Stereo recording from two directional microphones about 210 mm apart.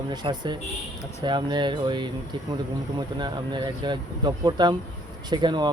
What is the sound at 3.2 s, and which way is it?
Speech, 20° right (ahead or behind).